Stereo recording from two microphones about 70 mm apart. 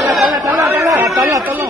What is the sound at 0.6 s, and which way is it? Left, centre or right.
Chatter, right.